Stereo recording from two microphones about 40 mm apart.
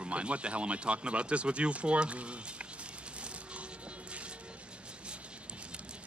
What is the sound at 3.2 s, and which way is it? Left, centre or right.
Coin, right.